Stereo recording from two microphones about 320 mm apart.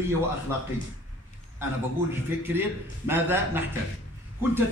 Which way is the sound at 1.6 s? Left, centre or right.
Centre.